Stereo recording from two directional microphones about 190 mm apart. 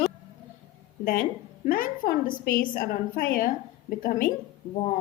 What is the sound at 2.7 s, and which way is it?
A woman's voice, 50° left (ahead or behind).